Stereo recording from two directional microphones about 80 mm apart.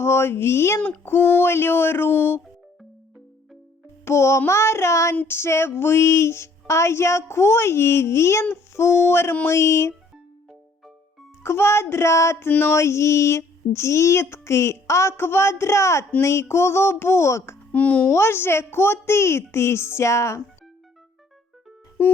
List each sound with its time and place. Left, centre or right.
0.0 s female singing: left
0.8 s speech: left
4.0 s female singing: left
5.1 s speech: left
5.4 s female singing: left
11.4 s female singing: left
17.7 s a child's voice: centre
18.1 s female singing: left